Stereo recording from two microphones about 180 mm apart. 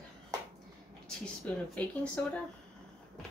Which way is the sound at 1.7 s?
5° left (ahead or behind).